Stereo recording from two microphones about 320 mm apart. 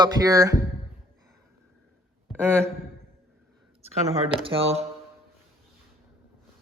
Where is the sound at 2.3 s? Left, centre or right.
Centre.